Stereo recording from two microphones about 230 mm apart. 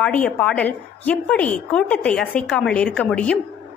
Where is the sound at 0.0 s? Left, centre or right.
Centre.